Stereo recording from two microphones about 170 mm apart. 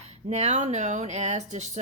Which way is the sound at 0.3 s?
40° right (ahead or behind).